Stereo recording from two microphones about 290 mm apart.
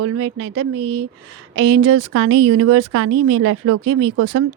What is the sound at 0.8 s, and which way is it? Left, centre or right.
Speech, right.